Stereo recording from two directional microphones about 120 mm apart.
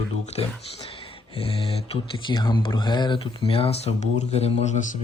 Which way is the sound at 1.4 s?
50° left (ahead or behind).